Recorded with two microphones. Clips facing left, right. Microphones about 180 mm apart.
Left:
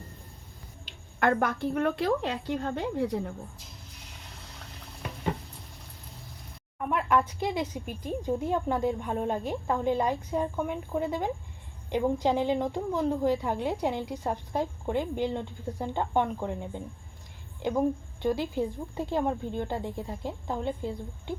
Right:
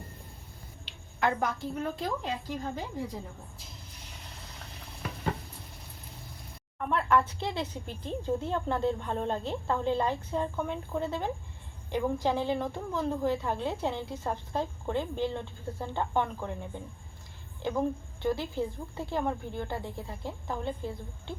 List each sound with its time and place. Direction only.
0.9 s a woman's voice: 55° left (ahead or behind)
6.7 s a woman's voice: 15° left (ahead or behind)